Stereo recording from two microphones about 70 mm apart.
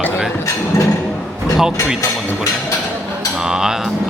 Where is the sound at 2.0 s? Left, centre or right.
Left.